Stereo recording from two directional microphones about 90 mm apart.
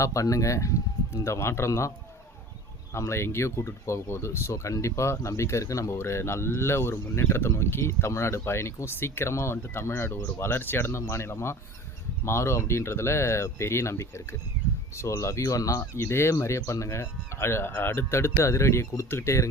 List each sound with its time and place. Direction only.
0.0 s speech: 35° left (ahead or behind)
2.9 s speech: 30° left (ahead or behind)